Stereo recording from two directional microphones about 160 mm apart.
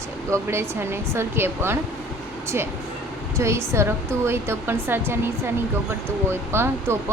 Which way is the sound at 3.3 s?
15° right (ahead or behind).